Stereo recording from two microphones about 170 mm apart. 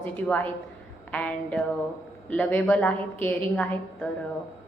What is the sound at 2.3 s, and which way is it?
A woman's voice, 10° left (ahead or behind).